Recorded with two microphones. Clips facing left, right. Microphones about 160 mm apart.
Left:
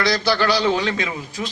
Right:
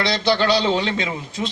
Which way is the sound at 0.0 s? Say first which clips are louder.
Even; 25° right (ahead or behind).